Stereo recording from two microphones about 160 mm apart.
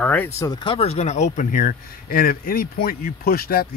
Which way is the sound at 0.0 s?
10° left (ahead or behind).